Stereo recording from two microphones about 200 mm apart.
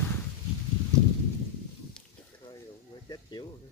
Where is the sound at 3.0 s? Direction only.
20° left (ahead or behind).